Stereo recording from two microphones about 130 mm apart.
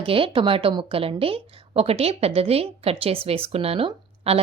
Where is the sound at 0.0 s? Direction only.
45° right (ahead or behind).